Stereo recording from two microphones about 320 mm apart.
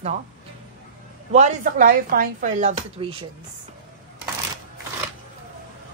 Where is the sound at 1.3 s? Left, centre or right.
Right.